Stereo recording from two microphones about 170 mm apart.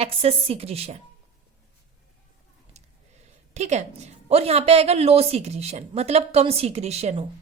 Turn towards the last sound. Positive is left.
turn(degrees=-40)  # may be behind; listen again after turning